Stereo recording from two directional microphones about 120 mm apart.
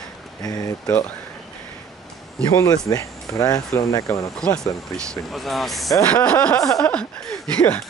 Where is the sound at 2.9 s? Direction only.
25° left (ahead or behind).